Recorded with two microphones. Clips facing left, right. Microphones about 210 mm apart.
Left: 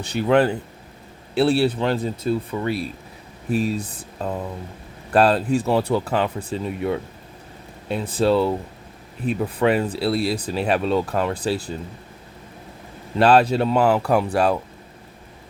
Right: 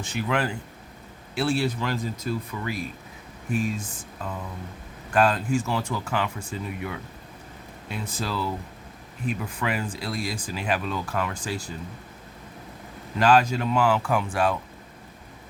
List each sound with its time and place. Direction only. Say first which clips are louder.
0.0 s speech: left 9 dB; 35° left (ahead or behind)
13.1 s speech: left 5 dB; 35° left (ahead or behind)